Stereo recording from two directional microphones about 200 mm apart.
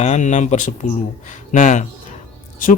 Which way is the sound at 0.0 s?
35° left (ahead or behind).